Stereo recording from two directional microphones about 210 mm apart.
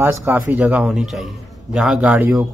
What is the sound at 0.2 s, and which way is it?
A man's voice, 5° right (ahead or behind).